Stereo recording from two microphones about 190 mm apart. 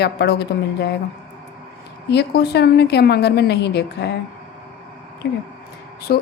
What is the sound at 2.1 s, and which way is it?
A woman's voice, 60° left (ahead or behind).